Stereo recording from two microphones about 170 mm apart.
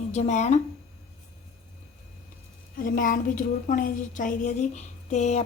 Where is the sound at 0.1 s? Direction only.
40° left (ahead or behind).